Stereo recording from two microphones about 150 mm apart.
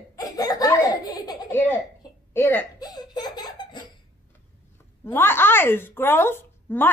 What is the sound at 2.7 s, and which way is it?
Laughter, 25° left (ahead or behind).